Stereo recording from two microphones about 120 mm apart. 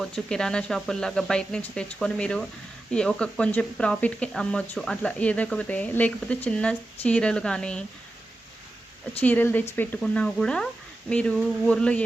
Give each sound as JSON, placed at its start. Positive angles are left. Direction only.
{"t": 0.0, "sound": "speech", "side_deg": 5}
{"t": 9.2, "sound": "speech", "side_deg": 15}
{"t": 10.0, "sound": "speech", "side_deg": 5}